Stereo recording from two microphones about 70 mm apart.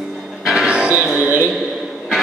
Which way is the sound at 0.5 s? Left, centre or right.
Centre.